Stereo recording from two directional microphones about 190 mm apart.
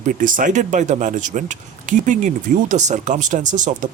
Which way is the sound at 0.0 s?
45° right (ahead or behind).